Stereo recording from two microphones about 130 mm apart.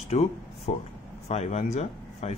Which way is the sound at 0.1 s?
55° left (ahead or behind).